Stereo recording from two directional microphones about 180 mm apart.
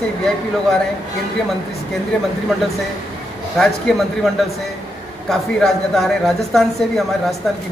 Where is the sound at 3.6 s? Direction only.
Centre (ahead or behind).